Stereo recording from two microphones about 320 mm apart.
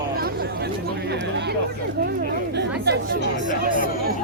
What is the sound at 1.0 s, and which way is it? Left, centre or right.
Speech, right.